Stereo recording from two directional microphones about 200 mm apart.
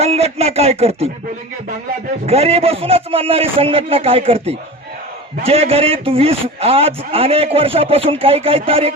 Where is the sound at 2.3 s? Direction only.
30° right (ahead or behind).